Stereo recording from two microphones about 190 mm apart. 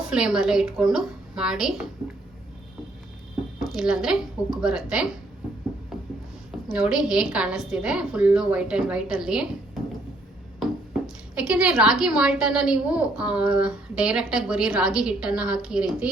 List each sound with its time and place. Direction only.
0.1 s speech: 5° right (ahead or behind)
3.6 s speech: centre (ahead or behind)
6.7 s speech: 5° right (ahead or behind)
10.6 s speech: 5° right (ahead or behind)